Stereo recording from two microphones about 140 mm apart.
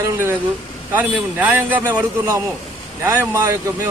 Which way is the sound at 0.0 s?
20° right (ahead or behind).